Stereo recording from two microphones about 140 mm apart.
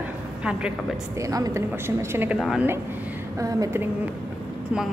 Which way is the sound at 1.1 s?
25° right (ahead or behind).